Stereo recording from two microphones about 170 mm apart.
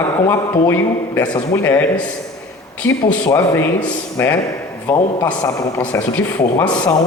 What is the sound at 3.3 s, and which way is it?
Speech, 15° left (ahead or behind).